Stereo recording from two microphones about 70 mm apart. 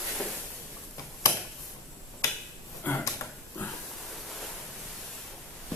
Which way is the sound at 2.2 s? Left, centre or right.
Left.